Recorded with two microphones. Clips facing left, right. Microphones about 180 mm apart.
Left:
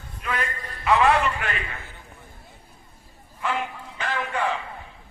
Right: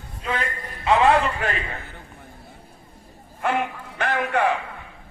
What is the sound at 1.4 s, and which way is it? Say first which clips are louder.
Speech: right 4 dB; 40° right (ahead or behind).